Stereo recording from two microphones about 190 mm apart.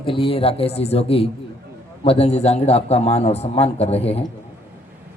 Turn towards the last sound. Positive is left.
turn(degrees=35)  # may be behind; listen again after turning